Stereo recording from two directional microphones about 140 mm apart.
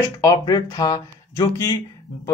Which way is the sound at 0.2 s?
25° left (ahead or behind).